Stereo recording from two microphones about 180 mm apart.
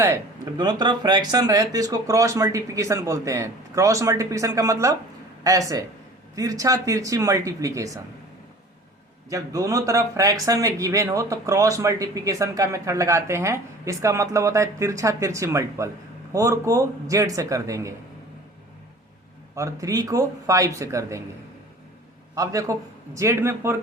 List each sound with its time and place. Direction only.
0.0 s speech: 20° right (ahead or behind)
9.3 s speech: 20° right (ahead or behind)
19.5 s speech: 20° right (ahead or behind)
22.4 s speech: 20° right (ahead or behind)